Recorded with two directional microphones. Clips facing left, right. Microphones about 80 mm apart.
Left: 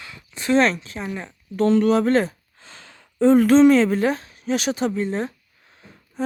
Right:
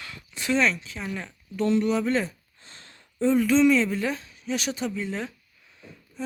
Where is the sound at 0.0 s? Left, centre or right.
Left.